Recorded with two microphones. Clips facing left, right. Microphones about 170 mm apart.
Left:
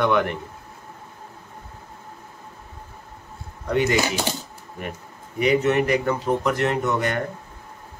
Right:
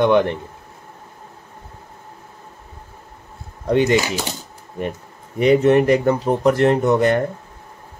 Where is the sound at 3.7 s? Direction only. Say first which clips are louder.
Right 5 dB; 25° right (ahead or behind).